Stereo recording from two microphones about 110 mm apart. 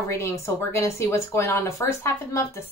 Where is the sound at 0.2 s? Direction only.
25° left (ahead or behind).